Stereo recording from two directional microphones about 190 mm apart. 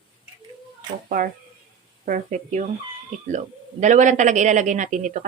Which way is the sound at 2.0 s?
40° right (ahead or behind).